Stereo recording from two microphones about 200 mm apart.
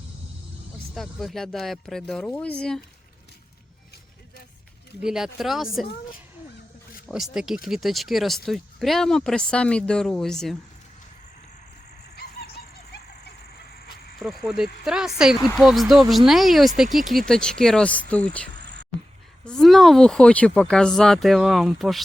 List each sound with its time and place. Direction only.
0.9 s speech: centre (ahead or behind)
5.0 s speech: centre (ahead or behind)
7.1 s speech: centre (ahead or behind)
12.1 s a sound: 55° left (ahead or behind)
14.2 s speech: centre (ahead or behind)
18.1 s cricket: 5° left (ahead or behind)
18.6 s music: 60° right (ahead or behind)
19.5 s speech: centre (ahead or behind)